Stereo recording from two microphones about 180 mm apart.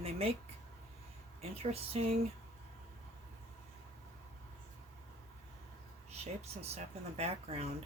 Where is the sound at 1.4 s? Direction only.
35° right (ahead or behind).